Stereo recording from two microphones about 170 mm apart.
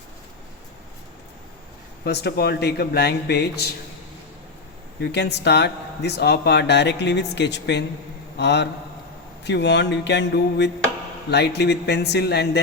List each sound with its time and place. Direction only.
2.0 s speech: 75° left (ahead or behind)
4.9 s speech: 80° left
9.4 s a sound: 90° left
11.3 s speech: 80° left